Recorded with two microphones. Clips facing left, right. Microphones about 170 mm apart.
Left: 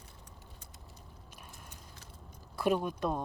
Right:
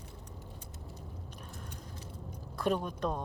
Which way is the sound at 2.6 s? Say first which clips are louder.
Left 2 dB; 5° left (ahead or behind).